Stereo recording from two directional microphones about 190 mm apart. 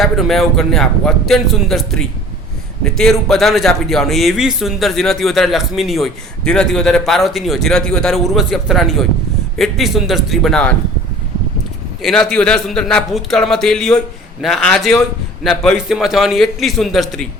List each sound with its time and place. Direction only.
0.0 s a man's voice: centre (ahead or behind)
12.0 s a man's voice: centre (ahead or behind)